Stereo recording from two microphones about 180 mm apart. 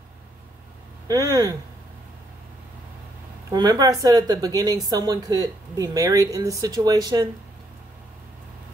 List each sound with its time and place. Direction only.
1.0 s speech: 20° right (ahead or behind)
3.4 s speech: 20° right (ahead or behind)